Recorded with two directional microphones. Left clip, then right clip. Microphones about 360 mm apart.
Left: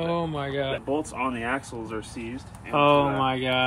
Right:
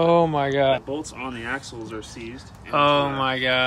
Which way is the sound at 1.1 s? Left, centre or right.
Centre.